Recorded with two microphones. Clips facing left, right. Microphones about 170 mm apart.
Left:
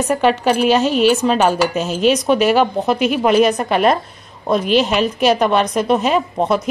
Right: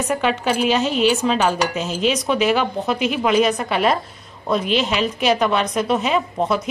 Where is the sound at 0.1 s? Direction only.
45° left (ahead or behind).